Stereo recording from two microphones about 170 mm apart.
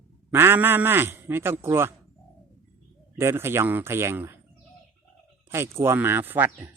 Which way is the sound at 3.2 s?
15° right (ahead or behind).